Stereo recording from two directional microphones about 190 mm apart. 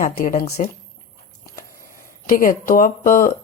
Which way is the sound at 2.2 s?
45° left (ahead or behind).